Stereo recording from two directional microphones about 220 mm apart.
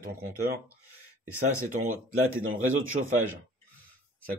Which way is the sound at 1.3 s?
90° right.